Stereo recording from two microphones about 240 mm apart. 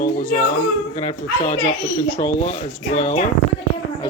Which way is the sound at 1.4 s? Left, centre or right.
Left.